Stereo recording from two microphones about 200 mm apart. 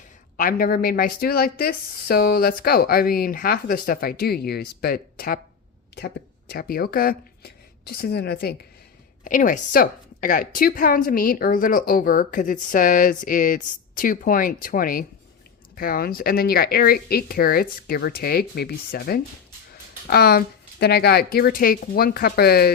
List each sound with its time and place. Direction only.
0.3 s a woman's voice: 45° left (ahead or behind)
6.5 s a woman's voice: 50° left (ahead or behind)
9.2 s a woman's voice: 40° left (ahead or behind)